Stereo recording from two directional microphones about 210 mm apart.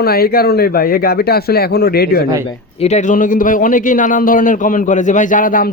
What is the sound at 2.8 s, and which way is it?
A man's voice, 35° left (ahead or behind).